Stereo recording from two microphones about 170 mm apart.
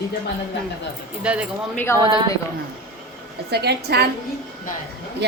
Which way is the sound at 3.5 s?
75° right (ahead or behind).